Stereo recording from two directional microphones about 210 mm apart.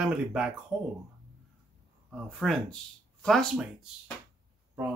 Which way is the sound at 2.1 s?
Centre (ahead or behind).